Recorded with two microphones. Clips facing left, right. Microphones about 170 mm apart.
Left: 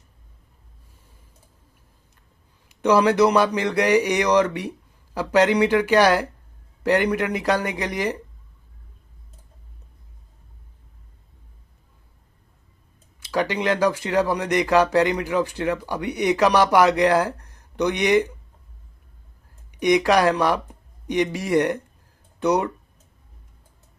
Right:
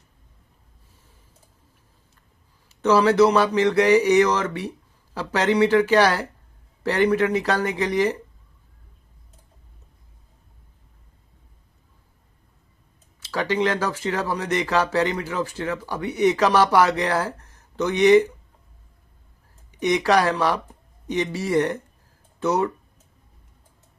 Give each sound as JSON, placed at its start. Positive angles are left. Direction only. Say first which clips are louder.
{"t": 2.6, "sound": "speech", "louder": "even", "side_deg": 15}
{"t": 13.1, "sound": "speech", "louder": "even", "side_deg": 15}
{"t": 19.8, "sound": "speech", "louder": "left 2 dB", "side_deg": 15}